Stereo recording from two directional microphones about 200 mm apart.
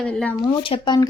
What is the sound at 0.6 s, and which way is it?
Speech, 25° left (ahead or behind).